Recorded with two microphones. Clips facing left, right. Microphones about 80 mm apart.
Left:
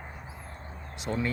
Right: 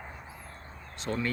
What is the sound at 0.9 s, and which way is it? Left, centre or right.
Speech, centre.